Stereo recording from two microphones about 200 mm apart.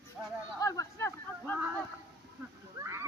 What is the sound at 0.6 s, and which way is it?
Speech, 15° left (ahead or behind).